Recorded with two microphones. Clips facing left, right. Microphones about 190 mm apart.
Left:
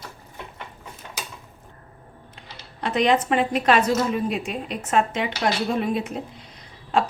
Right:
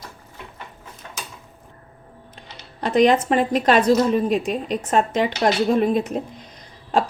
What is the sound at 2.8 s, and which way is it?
A woman's voice, 45° right (ahead or behind).